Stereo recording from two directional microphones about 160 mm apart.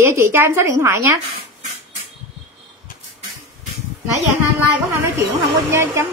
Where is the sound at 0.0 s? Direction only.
15° right (ahead or behind).